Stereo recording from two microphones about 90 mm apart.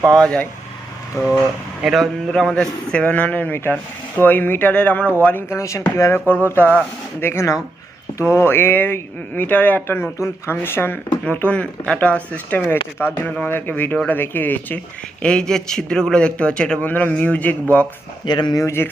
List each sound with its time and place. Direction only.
0.1 s a man's voice: 10° left (ahead or behind)
1.2 s speech: 30° left (ahead or behind)
1.8 s a man's voice: centre (ahead or behind); by 5.5 s 20° left (ahead or behind)
5.5 s a man's voice: 35° left (ahead or behind)
15.2 s a man's voice: 10° left (ahead or behind)
16.8 s a man's voice: 20° left (ahead or behind)
18.3 s speech: 55° left (ahead or behind)
18.6 s speech: 30° left (ahead or behind)